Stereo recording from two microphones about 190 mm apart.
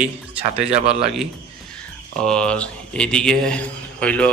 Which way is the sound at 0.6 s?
35° right (ahead or behind).